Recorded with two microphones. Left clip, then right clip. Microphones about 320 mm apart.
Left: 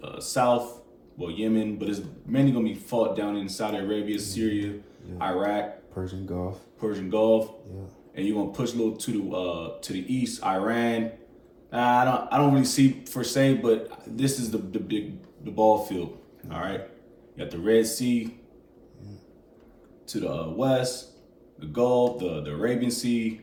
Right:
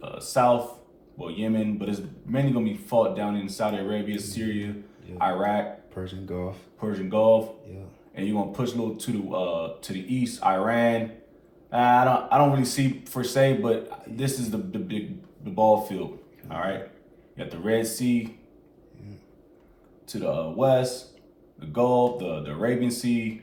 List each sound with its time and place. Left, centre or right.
0.0 s a man's voice: centre
5.2 s a man's voice: centre
6.2 s speech: centre
6.7 s a man's voice: centre
20.1 s a man's voice: centre